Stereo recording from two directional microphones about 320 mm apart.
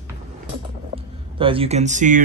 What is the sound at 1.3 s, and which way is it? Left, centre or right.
Speech, centre.